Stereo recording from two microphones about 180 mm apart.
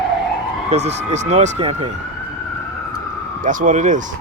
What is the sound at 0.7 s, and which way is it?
Speech, 35° right (ahead or behind).